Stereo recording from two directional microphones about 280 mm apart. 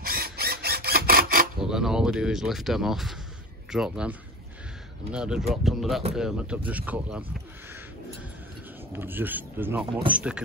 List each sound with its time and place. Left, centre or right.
0.0 s a sound: right
1.6 s speech: centre
8.9 s a man's voice: centre